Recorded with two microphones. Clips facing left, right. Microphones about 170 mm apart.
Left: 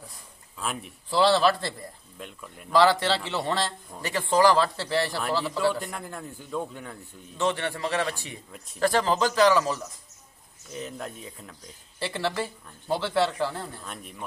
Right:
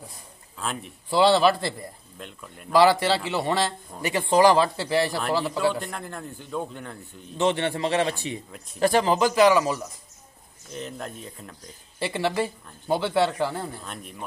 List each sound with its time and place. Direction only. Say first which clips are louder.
0.6 s a man's voice: right 1 dB; 5° left (ahead or behind)
1.1 s a man's voice: right 2 dB; 15° right (ahead or behind)
2.1 s a man's voice: even; centre (ahead or behind)
2.7 s a man's voice: right 2 dB; 10° right (ahead or behind)
5.7 s a man's voice: right 1 dB; 5° left (ahead or behind)
7.3 s a man's voice: right 4 dB; 20° right (ahead or behind)
10.7 s a man's voice: right 1 dB; 5° left (ahead or behind)
12.0 s a man's voice: right 4 dB; 15° right (ahead or behind)
13.7 s a man's voice: right 2 dB; centre (ahead or behind)